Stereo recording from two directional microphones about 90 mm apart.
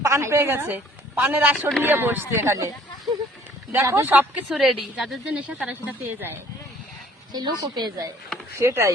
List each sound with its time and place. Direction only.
0.0 s a woman's voice: 30° right (ahead or behind)
4.0 s speech: 20° right (ahead or behind)
4.4 s a woman's voice: centre (ahead or behind)
6.0 s speech: 25° right (ahead or behind)
7.6 s a woman's voice: 45° right (ahead or behind)
8.5 s speech: 30° right (ahead or behind)